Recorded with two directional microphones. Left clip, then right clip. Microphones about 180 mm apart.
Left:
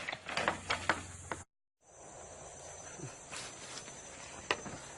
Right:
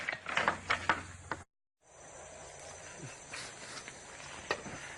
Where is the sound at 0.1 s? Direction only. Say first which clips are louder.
Right 3 dB; 5° left (ahead or behind).